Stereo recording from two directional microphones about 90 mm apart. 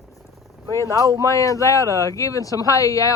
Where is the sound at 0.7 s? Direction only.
35° left (ahead or behind).